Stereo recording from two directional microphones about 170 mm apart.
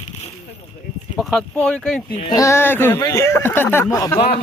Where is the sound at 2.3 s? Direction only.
15° left (ahead or behind).